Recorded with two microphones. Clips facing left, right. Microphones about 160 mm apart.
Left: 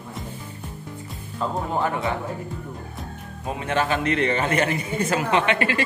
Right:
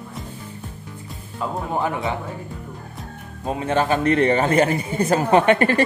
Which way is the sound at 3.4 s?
35° right (ahead or behind).